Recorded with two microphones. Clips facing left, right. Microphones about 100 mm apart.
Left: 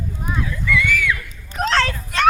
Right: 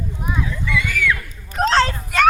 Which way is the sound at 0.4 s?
25° right (ahead or behind).